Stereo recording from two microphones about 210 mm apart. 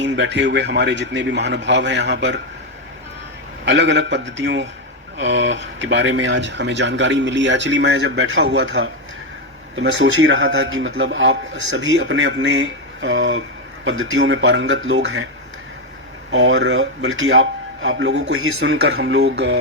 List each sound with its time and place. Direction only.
0.0 s speech: 60° right (ahead or behind)
3.7 s speech: 60° right (ahead or behind)
16.3 s speech: 65° right (ahead or behind); by 18.8 s 80° right
18.9 s speech: 55° right (ahead or behind)